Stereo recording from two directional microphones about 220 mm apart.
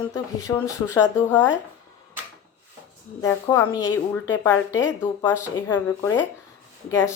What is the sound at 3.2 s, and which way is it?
A woman's voice, 10° left (ahead or behind).